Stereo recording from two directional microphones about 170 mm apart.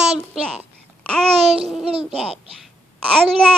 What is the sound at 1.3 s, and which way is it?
Babbling, 35° right (ahead or behind).